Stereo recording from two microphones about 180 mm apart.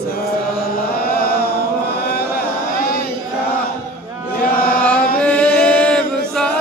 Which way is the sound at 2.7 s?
55° left (ahead or behind).